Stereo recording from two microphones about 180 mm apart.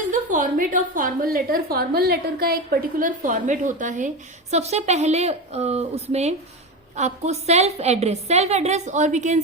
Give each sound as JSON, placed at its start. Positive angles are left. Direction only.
{"t": 0.1, "sound": "a woman's voice", "side_deg": -45}
{"t": 3.0, "sound": "a woman's voice", "side_deg": -45}